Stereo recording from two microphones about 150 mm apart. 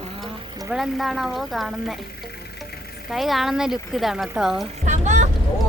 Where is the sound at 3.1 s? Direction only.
Centre (ahead or behind).